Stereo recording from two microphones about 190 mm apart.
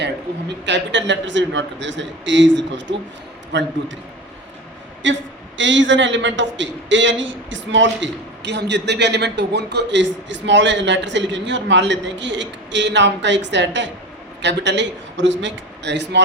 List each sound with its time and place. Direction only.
0.0 s a man's voice: 65° right (ahead or behind)
5.0 s a man's voice: 75° right (ahead or behind)